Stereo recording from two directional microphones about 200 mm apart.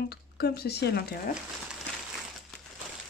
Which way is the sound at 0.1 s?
55° left (ahead or behind).